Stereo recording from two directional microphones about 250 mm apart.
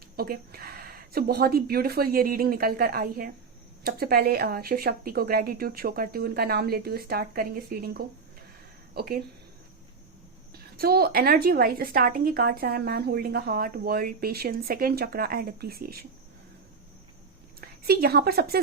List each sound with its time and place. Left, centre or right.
0.2 s a woman's voice: right
10.5 s a woman's voice: right
17.6 s a woman's voice: right